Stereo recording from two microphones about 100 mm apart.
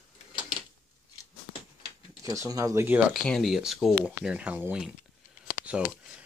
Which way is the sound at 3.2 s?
5° left (ahead or behind).